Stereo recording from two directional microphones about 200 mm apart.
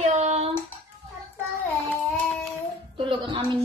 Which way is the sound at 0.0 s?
35° right (ahead or behind).